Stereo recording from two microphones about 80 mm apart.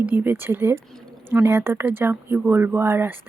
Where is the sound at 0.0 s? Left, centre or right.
Right.